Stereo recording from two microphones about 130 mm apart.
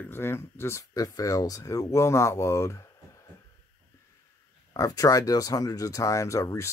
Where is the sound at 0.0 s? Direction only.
15° left (ahead or behind).